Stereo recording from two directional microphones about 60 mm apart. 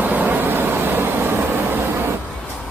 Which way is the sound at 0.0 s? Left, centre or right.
Right.